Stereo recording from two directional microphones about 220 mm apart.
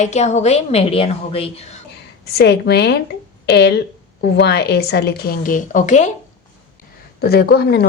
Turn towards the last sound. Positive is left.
turn(degrees=45)  # may be behind; listen again after turning